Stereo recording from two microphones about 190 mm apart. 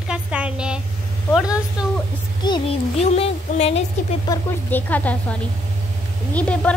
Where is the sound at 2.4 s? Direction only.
20° left (ahead or behind).